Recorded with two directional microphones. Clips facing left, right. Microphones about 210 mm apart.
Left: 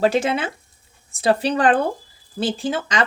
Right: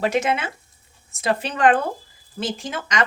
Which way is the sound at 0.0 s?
30° left (ahead or behind).